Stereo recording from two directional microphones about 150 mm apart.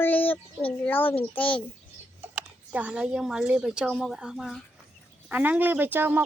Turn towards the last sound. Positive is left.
turn(degrees=-15)  # may be behind; listen again after turning